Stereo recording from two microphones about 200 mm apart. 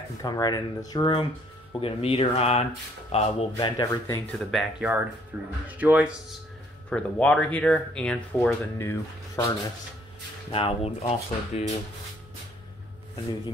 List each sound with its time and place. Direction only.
0.2 s speech: 20° left (ahead or behind)
4.3 s speech: centre (ahead or behind)
6.9 s speech: 5° left (ahead or behind)
10.5 s speech: 30° left (ahead or behind)